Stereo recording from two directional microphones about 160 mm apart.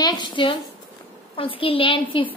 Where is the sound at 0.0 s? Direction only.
30° left (ahead or behind).